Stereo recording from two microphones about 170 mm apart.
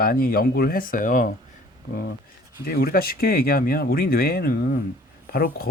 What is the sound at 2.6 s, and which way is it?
A man's voice, 60° left (ahead or behind).